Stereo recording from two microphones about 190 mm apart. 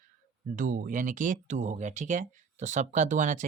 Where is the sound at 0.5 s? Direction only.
45° right (ahead or behind).